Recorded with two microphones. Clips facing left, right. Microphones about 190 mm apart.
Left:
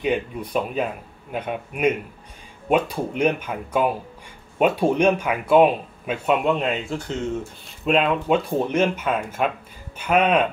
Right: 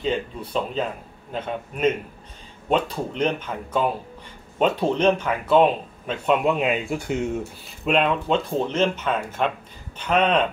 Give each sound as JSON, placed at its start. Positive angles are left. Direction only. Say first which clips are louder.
{"t": 0.0, "sound": "speech", "louder": "left 2 dB", "side_deg": 15}
{"t": 6.6, "sound": "speech", "louder": "right 2 dB", "side_deg": -10}
{"t": 7.8, "sound": "speech", "louder": "left 1 dB", "side_deg": 0}